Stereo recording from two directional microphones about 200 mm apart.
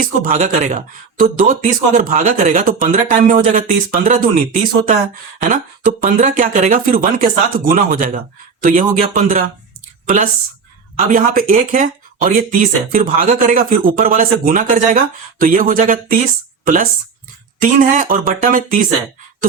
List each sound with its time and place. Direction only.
0.0 s speech: 40° right (ahead or behind)
11.1 s speech: 45° right (ahead or behind)